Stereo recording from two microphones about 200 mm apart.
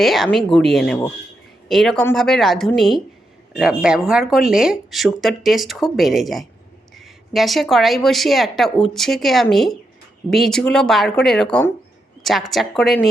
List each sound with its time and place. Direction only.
0.0 s speech: centre (ahead or behind)